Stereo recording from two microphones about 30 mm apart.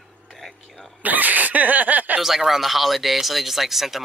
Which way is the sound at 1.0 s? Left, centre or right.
Right.